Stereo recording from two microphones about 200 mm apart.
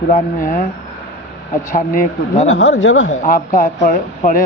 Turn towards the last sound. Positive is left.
turn(degrees=40)  # may be behind; listen again after turning